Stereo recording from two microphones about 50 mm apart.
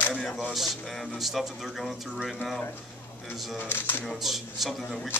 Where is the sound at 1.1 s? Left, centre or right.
Centre.